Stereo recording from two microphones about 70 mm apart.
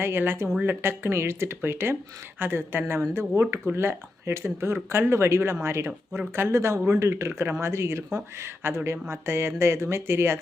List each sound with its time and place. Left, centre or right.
0.0 s speech: right